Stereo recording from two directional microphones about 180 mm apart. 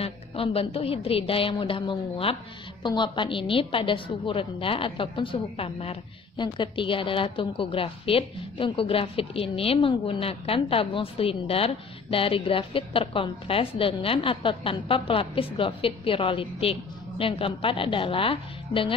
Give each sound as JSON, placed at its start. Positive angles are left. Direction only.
{"t": 0.0, "sound": "a woman's voice", "side_deg": 35}